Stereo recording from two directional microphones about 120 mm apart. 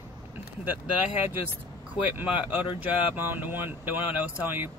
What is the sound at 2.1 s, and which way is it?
Speech, 15° right (ahead or behind).